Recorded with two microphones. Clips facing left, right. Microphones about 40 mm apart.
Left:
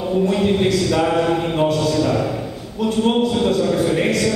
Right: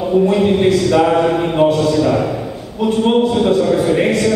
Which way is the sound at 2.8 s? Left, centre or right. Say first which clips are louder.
Right 4 dB; centre.